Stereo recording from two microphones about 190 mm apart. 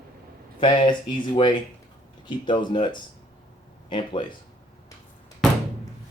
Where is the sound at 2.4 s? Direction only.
25° left (ahead or behind).